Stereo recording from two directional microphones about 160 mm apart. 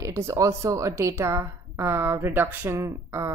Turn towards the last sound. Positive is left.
turn(degrees=-20)  # may be behind; listen again after turning